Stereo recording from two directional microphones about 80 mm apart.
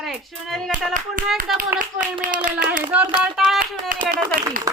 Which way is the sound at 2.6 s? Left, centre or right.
Centre.